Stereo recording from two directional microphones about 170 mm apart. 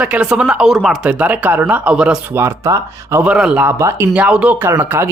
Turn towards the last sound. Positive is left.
turn(degrees=-15)  # may be behind; listen again after turning